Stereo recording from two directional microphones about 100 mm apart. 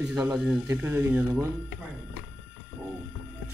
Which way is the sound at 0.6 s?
20° right (ahead or behind).